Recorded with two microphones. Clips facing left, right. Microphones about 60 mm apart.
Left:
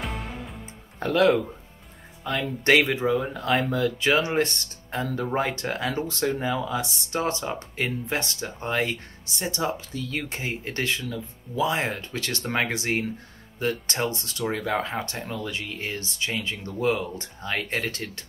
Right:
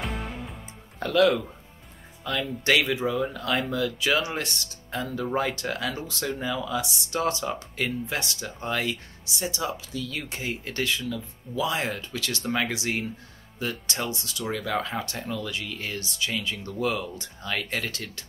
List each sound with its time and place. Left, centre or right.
0.0 s music: centre
0.9 s speech: left